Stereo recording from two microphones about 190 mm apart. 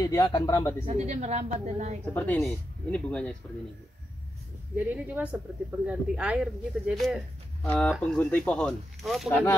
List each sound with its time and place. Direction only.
0.0 s speech: 20° left (ahead or behind)
0.8 s a woman's voice: 35° right (ahead or behind)
2.1 s speech: 10° left (ahead or behind)
4.7 s speech: 10° right (ahead or behind); by 9.6 s 10° left (ahead or behind)